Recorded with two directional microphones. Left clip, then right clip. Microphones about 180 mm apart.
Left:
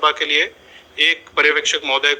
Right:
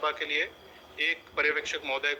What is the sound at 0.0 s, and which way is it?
A man's voice, 30° left (ahead or behind).